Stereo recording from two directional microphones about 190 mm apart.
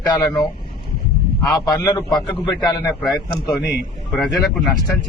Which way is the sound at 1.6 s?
20° left (ahead or behind).